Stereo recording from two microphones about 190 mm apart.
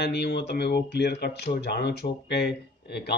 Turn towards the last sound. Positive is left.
turn(degrees=60)  # may be behind; listen again after turning